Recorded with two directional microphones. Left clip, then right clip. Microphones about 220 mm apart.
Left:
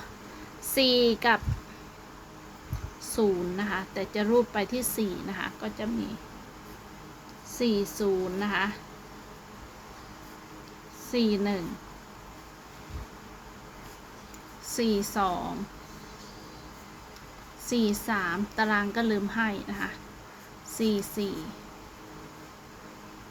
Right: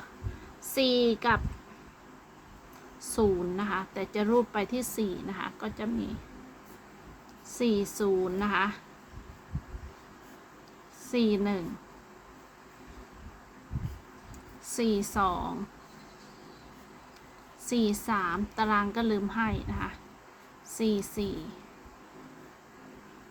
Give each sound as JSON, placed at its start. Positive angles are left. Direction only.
{"t": 0.7, "sound": "a woman's voice", "side_deg": -5}
{"t": 3.0, "sound": "a woman's voice", "side_deg": -15}
{"t": 7.6, "sound": "a woman's voice", "side_deg": -15}
{"t": 11.1, "sound": "a woman's voice", "side_deg": -10}
{"t": 14.8, "sound": "a woman's voice", "side_deg": -10}
{"t": 17.7, "sound": "a woman's voice", "side_deg": -10}